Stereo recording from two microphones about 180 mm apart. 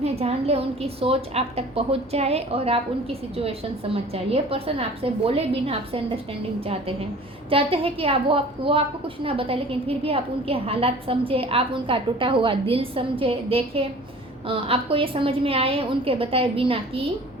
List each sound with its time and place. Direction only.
0.0 s a woman's voice: 35° right (ahead or behind)
7.5 s a woman's voice: 30° right (ahead or behind)